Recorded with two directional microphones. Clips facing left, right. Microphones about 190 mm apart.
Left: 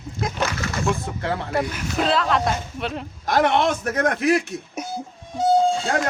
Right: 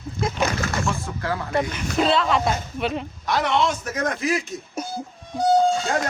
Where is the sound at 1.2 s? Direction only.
25° left (ahead or behind).